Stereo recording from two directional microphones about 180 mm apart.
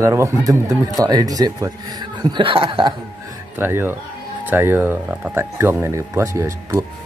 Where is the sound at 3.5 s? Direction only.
10° right (ahead or behind).